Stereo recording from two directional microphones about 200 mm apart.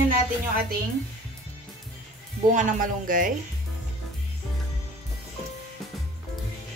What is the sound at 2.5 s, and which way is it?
Speech, 40° right (ahead or behind).